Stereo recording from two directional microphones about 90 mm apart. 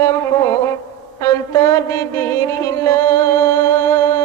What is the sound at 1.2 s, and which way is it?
Music, 40° left (ahead or behind).